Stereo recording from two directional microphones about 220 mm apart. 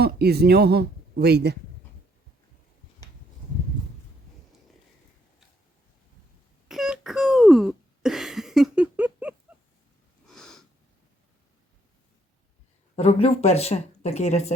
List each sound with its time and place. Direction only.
0.0 s speech: 45° right (ahead or behind)
6.7 s a sound: centre (ahead or behind)
10.2 s snort: centre (ahead or behind)
13.0 s speech: 30° left (ahead or behind)